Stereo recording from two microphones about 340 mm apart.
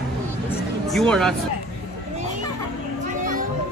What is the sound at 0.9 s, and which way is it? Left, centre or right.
Speech, centre.